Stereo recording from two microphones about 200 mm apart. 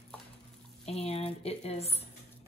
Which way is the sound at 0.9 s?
30° left (ahead or behind).